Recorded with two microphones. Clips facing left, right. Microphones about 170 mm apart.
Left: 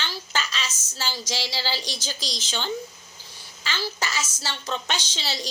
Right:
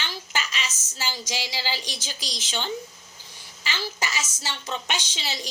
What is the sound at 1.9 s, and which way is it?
Speech, 40° left (ahead or behind).